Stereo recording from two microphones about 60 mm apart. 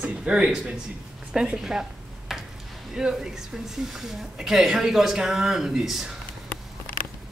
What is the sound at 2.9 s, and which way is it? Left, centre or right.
Speech, centre.